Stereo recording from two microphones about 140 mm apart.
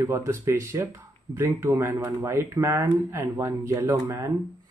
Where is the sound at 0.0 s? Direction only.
20° right (ahead or behind).